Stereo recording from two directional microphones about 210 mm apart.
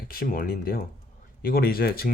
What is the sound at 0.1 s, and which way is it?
Speech, 45° left (ahead or behind).